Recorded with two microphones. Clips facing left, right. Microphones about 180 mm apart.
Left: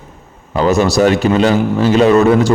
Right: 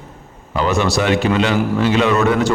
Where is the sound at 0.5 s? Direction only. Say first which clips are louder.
Left 5 dB; 40° left (ahead or behind).